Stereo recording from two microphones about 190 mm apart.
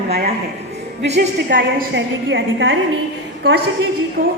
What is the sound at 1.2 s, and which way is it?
A woman's voice, 70° right (ahead or behind).